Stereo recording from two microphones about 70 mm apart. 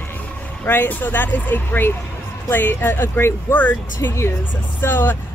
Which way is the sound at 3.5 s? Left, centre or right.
Left.